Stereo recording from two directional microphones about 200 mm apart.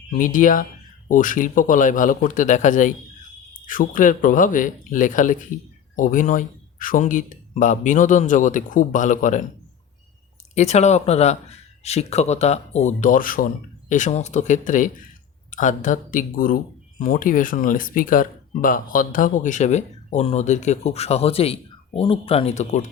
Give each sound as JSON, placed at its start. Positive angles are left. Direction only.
{"t": 0.2, "sound": "speech", "side_deg": 40}
{"t": 10.5, "sound": "speech", "side_deg": 35}